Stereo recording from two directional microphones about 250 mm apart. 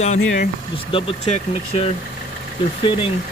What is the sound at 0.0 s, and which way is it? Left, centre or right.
Speech, left.